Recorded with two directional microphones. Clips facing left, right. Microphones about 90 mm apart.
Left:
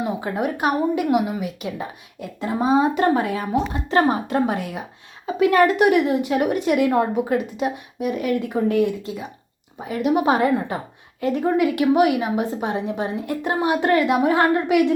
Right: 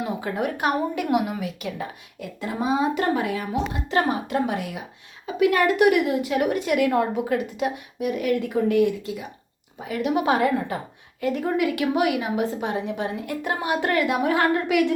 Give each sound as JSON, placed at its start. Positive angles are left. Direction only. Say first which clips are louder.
{"t": 0.0, "sound": "a woman's voice", "louder": "left 2 dB", "side_deg": 25}
{"t": 2.4, "sound": "a woman's voice", "louder": "left 5 dB", "side_deg": 30}